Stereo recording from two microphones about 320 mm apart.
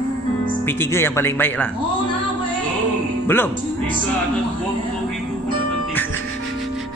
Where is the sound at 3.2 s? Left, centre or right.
Centre.